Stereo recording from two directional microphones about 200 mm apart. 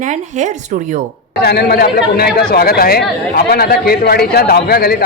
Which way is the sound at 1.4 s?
55° left (ahead or behind).